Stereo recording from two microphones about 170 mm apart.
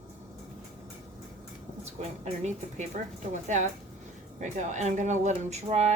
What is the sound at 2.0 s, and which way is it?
A woman's voice, 40° right (ahead or behind).